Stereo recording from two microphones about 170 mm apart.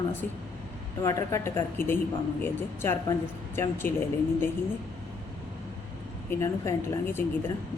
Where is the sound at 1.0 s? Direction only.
20° left (ahead or behind).